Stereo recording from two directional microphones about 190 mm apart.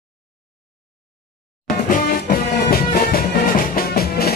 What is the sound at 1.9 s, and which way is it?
Music, 45° left (ahead or behind).